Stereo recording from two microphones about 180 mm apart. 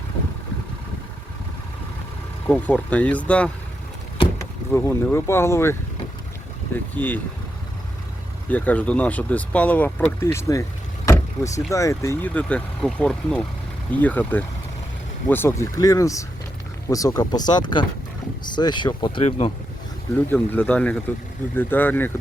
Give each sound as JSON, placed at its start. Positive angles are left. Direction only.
{"t": 2.5, "sound": "speech", "side_deg": 10}
{"t": 4.7, "sound": "speech", "side_deg": 15}
{"t": 6.9, "sound": "speech", "side_deg": 10}
{"t": 8.4, "sound": "speech", "side_deg": 10}
{"t": 20.1, "sound": "speech", "side_deg": 10}